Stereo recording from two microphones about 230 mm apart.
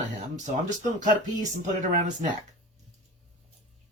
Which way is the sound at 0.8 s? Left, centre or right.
Right.